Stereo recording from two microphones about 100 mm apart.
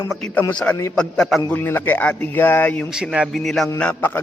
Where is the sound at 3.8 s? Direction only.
15° left (ahead or behind).